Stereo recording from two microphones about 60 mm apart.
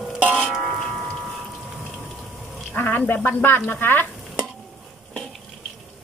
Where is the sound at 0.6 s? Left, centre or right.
Centre.